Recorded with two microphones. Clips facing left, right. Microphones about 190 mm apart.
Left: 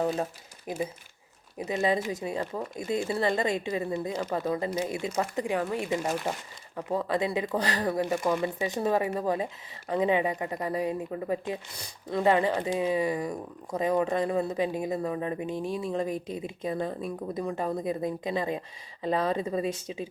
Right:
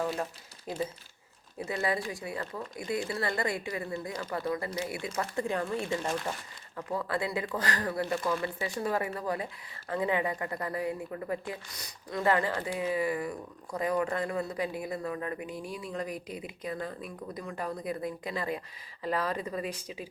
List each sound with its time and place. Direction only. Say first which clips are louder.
0.0 s speech: left 4 dB; 20° left (ahead or behind)